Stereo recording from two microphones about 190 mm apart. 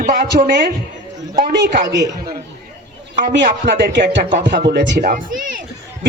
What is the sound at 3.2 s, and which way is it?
Speech, 60° right (ahead or behind).